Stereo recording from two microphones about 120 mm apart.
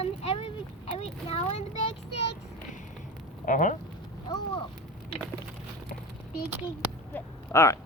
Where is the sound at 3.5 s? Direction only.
90° left.